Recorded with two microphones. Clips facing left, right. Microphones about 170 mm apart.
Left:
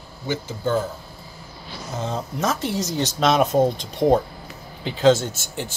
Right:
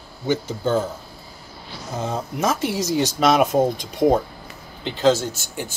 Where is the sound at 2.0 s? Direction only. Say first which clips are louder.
Right 2 dB; 10° right (ahead or behind).